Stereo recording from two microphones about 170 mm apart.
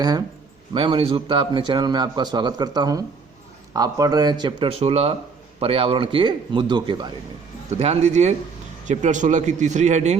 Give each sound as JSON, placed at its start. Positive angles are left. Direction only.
{"t": 0.0, "sound": "a man's voice", "side_deg": -25}
{"t": 4.8, "sound": "a man's voice", "side_deg": -35}
{"t": 7.7, "sound": "a man's voice", "side_deg": -40}